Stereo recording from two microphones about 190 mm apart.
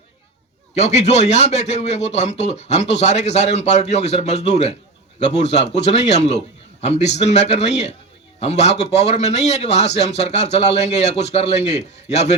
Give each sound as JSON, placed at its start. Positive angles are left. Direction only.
{"t": 0.8, "sound": "a man's voice", "side_deg": 35}